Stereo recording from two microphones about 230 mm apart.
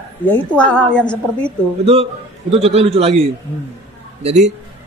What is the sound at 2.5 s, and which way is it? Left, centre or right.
Speech, right.